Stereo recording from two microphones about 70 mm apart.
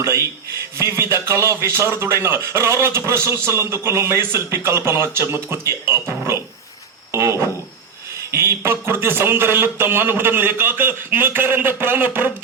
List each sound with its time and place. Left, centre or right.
0.0 s a man's voice: right